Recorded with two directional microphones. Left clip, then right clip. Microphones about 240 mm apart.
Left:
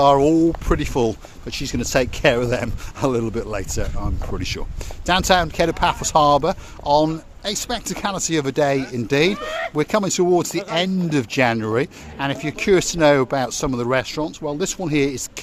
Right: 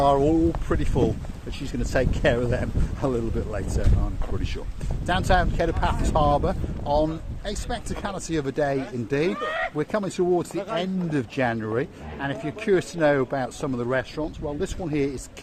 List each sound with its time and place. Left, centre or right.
0.0 s speech: left